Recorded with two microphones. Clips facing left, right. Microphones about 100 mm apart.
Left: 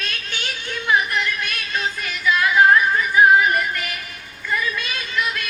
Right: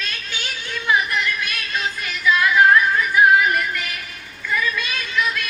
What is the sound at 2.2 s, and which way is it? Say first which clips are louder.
Music: right 1 dB; 5° left (ahead or behind).